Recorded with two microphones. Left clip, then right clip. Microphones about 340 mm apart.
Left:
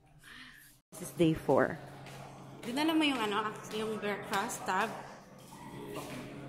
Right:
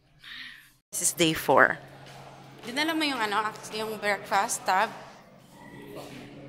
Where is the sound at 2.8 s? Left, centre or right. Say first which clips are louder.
Right 3 dB; centre.